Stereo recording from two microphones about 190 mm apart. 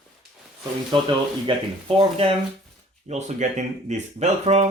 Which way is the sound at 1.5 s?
30° right (ahead or behind).